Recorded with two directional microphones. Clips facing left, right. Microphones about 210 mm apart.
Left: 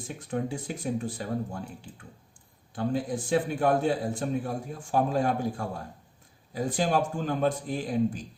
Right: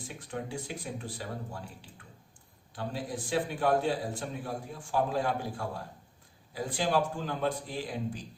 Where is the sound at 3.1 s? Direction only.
45° left (ahead or behind).